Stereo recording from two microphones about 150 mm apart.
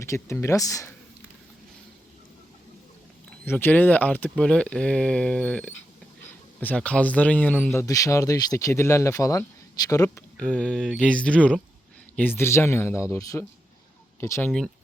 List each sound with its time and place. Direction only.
0.0 s speech: 20° left (ahead or behind)
3.4 s speech: 15° left (ahead or behind)
10.3 s speech: 10° left (ahead or behind)